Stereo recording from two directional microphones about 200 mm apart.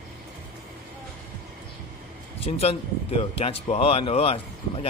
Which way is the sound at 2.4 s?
30° left (ahead or behind).